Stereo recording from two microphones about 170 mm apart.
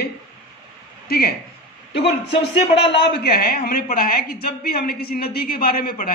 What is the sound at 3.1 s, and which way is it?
A woman's voice, 65° left (ahead or behind).